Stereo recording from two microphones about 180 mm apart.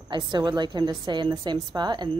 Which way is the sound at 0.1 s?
25° right (ahead or behind).